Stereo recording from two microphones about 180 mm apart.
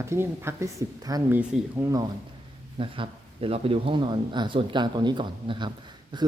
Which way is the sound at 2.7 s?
30° right (ahead or behind).